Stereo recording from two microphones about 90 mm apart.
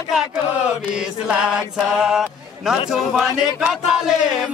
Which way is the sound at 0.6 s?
10° right (ahead or behind).